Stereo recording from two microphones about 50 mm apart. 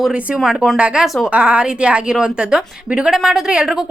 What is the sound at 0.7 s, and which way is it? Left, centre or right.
Speech, right.